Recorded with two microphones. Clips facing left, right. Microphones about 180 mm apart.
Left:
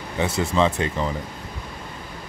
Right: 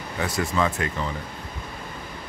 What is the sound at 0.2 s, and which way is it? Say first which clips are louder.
Speech: left 4 dB; 25° left (ahead or behind).